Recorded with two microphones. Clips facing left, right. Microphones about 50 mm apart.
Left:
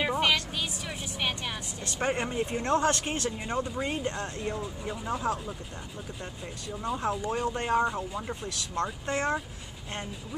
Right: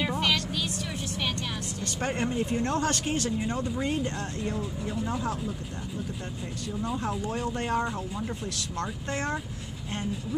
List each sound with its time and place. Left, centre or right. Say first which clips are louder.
0.0 s vehicle: left 1 dB; centre
2.0 s speech: even; centre
7.0 s speech: left 1 dB; centre